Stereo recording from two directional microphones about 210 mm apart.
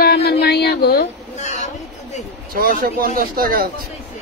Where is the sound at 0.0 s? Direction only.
50° left (ahead or behind).